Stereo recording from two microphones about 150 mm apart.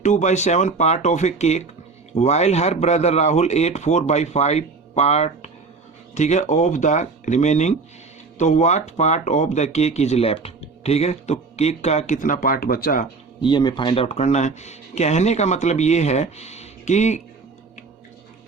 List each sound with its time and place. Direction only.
0.0 s speech: 50° left (ahead or behind); by 13.1 s 75° left (ahead or behind)
13.4 s speech: 30° left (ahead or behind); by 17.2 s 50° left (ahead or behind)